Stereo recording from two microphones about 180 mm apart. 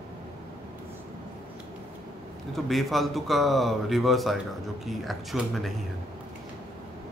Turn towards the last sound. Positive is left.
turn(degrees=0)  # may be behind; listen again after turning